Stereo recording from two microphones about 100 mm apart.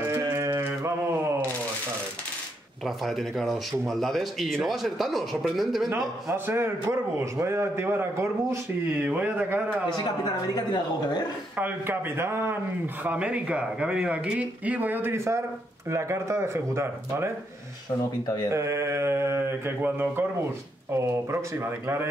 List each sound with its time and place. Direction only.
0.0 s music: 25° right (ahead or behind)
2.8 s a man's voice: centre (ahead or behind)
6.3 s a man's voice: 25° right (ahead or behind)
10.5 s speech: 45° left (ahead or behind)
11.5 s a man's voice: 20° right (ahead or behind)
13.0 s a man's voice: 15° right (ahead or behind)
18.2 s speech: 40° left (ahead or behind)
18.5 s a man's voice: 30° right (ahead or behind)